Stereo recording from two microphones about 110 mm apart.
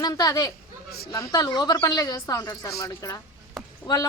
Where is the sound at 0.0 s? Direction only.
35° left (ahead or behind).